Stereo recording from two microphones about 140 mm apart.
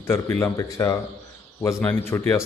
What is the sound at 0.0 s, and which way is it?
A man's voice, 15° left (ahead or behind).